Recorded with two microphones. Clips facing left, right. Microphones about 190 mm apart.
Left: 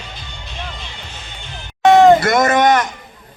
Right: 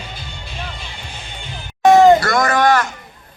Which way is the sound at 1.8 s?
5° right (ahead or behind).